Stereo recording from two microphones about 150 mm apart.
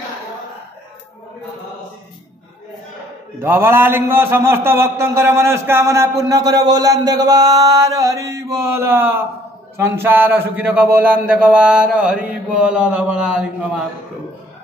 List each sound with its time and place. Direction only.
3.4 s a man's voice: 15° right (ahead or behind)